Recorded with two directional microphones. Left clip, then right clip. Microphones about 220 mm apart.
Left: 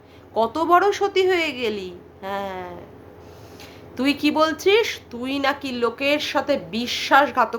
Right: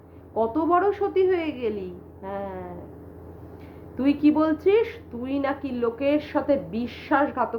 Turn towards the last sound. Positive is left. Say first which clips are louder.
# left 6 dB
turn(degrees=15)  # may be behind; listen again after turning